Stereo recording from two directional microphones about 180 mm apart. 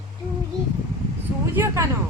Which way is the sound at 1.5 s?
15° right (ahead or behind).